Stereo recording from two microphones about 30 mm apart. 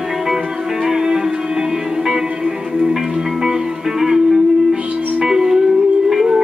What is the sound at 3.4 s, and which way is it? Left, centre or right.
Music, centre.